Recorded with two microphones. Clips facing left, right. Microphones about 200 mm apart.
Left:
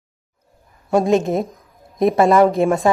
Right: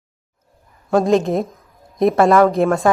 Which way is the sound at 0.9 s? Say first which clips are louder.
Right 1 dB; centre (ahead or behind).